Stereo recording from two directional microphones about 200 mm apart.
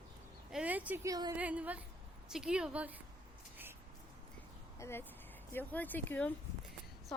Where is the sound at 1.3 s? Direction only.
5° right (ahead or behind).